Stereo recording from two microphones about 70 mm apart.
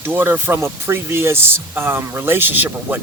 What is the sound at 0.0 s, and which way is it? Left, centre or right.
Speech, right.